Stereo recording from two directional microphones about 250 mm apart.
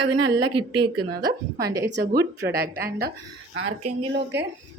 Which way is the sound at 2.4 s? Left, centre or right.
Right.